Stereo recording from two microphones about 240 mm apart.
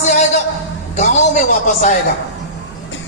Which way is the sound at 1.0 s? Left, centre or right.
Left.